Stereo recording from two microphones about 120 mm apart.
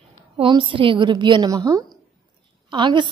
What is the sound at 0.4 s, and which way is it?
A woman's voice, 45° right (ahead or behind).